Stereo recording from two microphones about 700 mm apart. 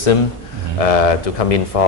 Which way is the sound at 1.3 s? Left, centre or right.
Left.